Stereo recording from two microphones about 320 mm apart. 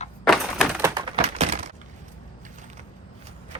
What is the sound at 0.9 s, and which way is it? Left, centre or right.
Typing, centre.